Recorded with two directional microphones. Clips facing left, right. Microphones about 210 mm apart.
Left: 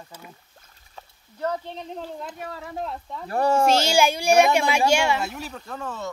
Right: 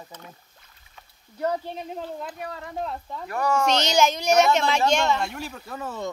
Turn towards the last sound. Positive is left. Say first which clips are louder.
# right 1 dB
turn(degrees=-10)  # may be behind; listen again after turning